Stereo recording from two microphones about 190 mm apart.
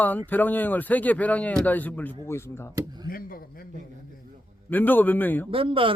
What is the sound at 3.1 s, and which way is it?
Speech, 50° left (ahead or behind).